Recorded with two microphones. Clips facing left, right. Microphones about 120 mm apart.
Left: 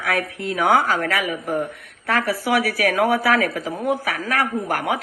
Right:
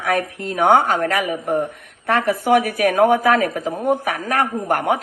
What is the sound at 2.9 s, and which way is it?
Speech, 40° right (ahead or behind).